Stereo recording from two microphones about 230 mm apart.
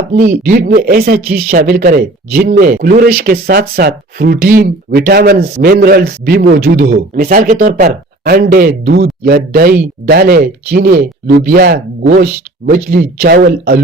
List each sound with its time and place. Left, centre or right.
0.1 s speech: right